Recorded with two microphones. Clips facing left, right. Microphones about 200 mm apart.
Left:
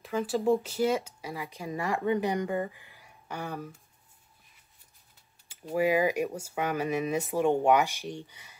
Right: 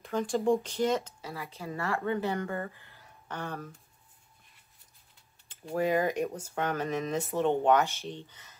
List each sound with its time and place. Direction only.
0.0 s speech: 5° left (ahead or behind)
5.5 s speech: 10° left (ahead or behind)